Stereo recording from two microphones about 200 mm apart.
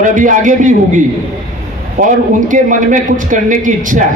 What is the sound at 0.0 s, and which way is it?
A man's voice, 40° right (ahead or behind).